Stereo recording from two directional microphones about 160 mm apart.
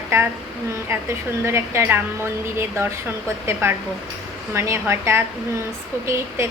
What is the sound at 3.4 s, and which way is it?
A woman's voice, 15° right (ahead or behind).